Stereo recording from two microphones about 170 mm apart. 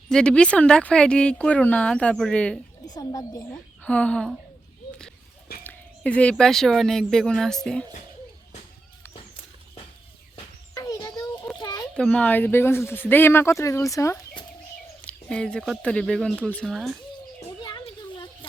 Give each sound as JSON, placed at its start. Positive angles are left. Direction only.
{"t": 0.1, "sound": "speech", "side_deg": 5}
{"t": 2.8, "sound": "a woman's voice", "side_deg": 25}
{"t": 3.8, "sound": "speech", "side_deg": 5}
{"t": 5.6, "sound": "speech", "side_deg": 5}
{"t": 10.8, "sound": "children playing", "side_deg": 20}
{"t": 11.6, "sound": "a sound", "side_deg": 20}
{"t": 11.9, "sound": "speech", "side_deg": 10}
{"t": 15.0, "sound": "speech", "side_deg": 5}
{"t": 17.6, "sound": "children playing", "side_deg": 25}